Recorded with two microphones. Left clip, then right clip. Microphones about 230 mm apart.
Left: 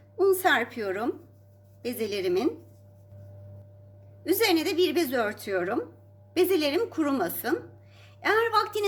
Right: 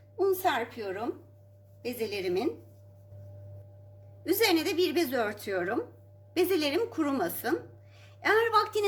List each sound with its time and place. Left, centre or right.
0.2 s a woman's voice: centre
4.3 s a woman's voice: centre